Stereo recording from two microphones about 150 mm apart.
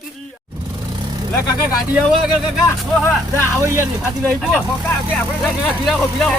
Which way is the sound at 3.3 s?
20° right (ahead or behind).